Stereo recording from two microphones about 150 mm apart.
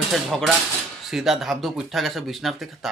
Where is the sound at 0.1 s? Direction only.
Centre (ahead or behind).